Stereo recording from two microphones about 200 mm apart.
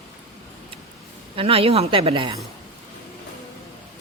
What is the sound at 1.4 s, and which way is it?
Speech, 30° right (ahead or behind).